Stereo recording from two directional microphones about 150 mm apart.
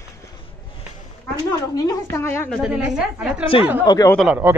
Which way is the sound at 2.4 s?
5° left (ahead or behind).